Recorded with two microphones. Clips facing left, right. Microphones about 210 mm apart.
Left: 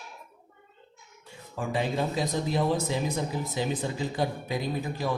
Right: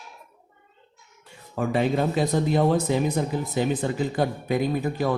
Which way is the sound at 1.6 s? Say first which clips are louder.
Right 6 dB; 60° right (ahead or behind).